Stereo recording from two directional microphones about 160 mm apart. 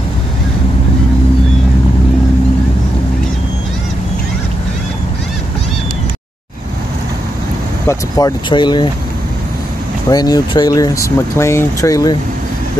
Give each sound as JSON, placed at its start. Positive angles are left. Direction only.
{"t": 7.9, "sound": "speech", "side_deg": 25}
{"t": 10.0, "sound": "speech", "side_deg": 25}